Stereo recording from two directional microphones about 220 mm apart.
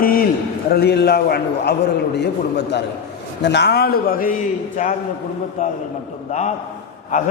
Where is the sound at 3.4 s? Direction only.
50° left (ahead or behind).